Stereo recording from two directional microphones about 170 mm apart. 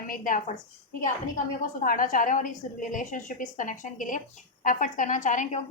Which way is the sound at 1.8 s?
55° left (ahead or behind).